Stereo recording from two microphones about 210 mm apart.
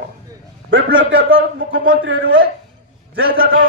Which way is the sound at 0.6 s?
65° right (ahead or behind).